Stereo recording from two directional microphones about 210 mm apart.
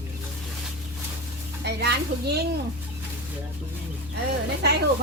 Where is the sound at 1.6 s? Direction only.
50° right (ahead or behind).